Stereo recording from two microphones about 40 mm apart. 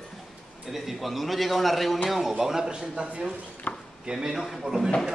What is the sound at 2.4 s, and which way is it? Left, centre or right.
Speech, centre.